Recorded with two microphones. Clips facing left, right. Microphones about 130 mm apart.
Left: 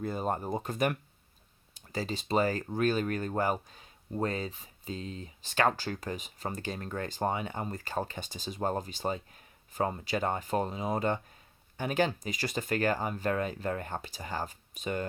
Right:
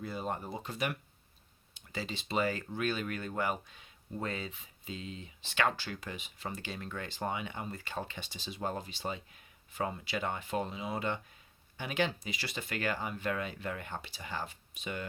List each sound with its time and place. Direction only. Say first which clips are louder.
0.0 s speech: left 5 dB; 45° left (ahead or behind)